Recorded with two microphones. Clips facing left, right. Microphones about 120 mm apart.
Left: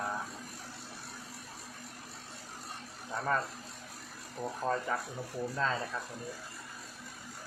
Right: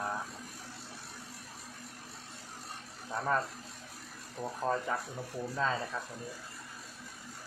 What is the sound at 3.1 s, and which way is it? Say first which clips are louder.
Speech: right 1 dB; centre (ahead or behind).